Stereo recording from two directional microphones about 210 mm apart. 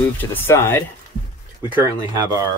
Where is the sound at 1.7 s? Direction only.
15° right (ahead or behind).